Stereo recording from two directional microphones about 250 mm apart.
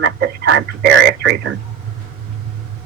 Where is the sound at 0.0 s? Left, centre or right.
Right.